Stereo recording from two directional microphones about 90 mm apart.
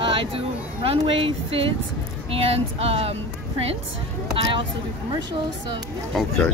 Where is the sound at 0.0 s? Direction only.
80° right.